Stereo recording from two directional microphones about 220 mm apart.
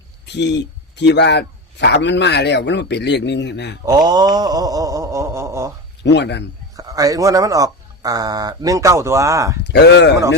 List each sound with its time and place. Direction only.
0.3 s speech: 50° left (ahead or behind)
3.8 s speech: 15° right (ahead or behind)
6.0 s speech: 50° left (ahead or behind)
6.7 s speech: 15° right (ahead or behind)
9.6 s speech: 50° left (ahead or behind)